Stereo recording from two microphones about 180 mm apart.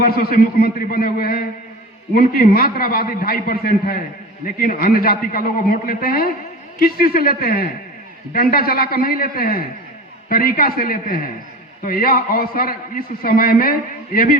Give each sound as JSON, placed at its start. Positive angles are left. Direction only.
{"t": 0.0, "sound": "a man's voice", "side_deg": 55}